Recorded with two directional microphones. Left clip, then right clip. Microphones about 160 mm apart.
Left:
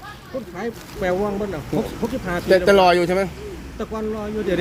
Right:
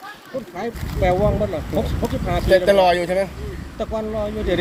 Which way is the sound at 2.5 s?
90° left.